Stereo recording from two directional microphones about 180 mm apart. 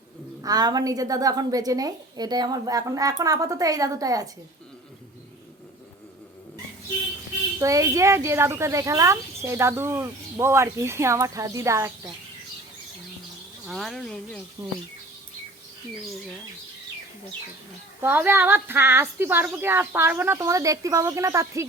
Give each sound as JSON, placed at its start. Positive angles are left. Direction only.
{"t": 0.4, "sound": "a woman's voice", "side_deg": -20}
{"t": 7.6, "sound": "speech", "side_deg": -20}
{"t": 13.7, "sound": "speech", "side_deg": 0}
{"t": 18.0, "sound": "speech", "side_deg": -10}